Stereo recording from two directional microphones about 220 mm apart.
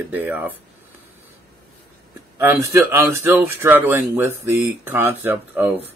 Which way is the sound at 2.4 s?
10° right (ahead or behind).